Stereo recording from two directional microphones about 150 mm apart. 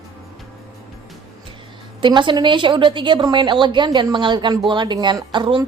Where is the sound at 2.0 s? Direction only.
30° right (ahead or behind).